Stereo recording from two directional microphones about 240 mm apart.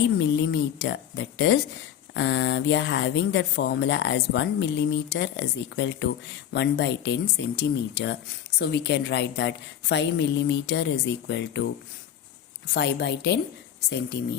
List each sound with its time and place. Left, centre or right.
0.2 s speech: left